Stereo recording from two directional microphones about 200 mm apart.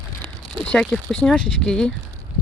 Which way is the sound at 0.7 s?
5° left (ahead or behind).